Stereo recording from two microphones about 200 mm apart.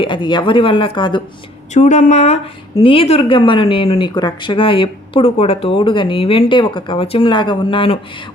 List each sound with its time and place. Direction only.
0.0 s speech: 25° left (ahead or behind)
1.7 s speech: 35° left (ahead or behind)